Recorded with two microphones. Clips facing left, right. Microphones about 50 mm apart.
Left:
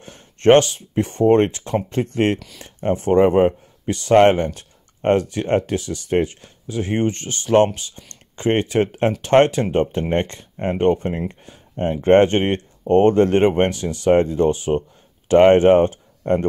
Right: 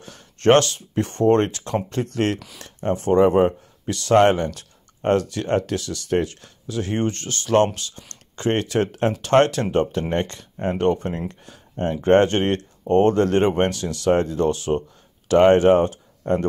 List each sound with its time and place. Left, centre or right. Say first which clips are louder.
0.0 s speech: left 3 dB; left
2.3 s speech: left 4 dB; centre
2.6 s speech: left 2 dB; left